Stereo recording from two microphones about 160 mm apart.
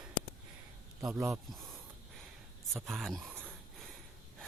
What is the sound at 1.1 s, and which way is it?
Speech, 20° right (ahead or behind).